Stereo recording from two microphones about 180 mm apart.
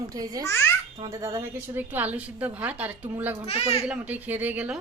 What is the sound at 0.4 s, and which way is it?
Speech, 15° left (ahead or behind).